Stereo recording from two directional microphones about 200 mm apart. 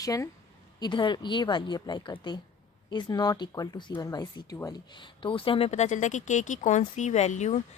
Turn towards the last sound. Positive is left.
turn(degrees=35)  # may be behind; listen again after turning